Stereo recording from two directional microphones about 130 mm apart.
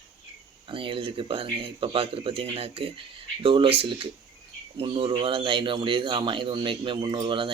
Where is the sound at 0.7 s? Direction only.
40° right (ahead or behind).